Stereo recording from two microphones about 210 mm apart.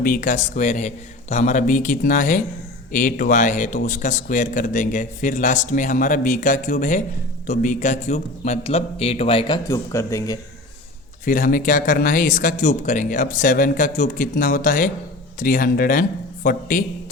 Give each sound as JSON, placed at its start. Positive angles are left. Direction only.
{"t": 0.0, "sound": "a man's voice", "side_deg": 40}
{"t": 9.6, "sound": "speech", "side_deg": 15}
{"t": 11.3, "sound": "a man's voice", "side_deg": 40}